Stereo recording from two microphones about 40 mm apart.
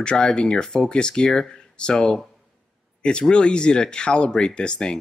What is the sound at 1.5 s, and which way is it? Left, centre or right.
Speech, left.